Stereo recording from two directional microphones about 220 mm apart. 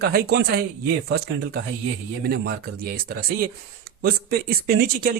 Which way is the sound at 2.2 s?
45° right (ahead or behind).